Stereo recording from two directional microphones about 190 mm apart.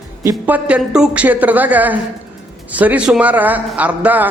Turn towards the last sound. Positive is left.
turn(degrees=-10)  # may be behind; listen again after turning